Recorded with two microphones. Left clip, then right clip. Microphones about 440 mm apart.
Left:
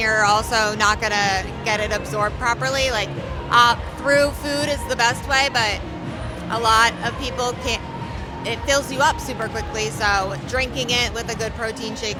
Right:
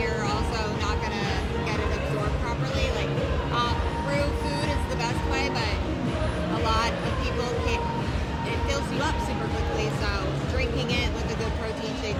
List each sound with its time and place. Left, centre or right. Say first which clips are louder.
0.0 s speech: left 11 dB; left
2.4 s music: left 9 dB; left